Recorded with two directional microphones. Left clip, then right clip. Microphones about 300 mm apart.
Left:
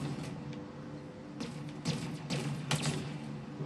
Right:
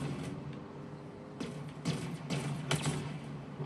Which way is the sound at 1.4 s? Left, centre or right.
Centre.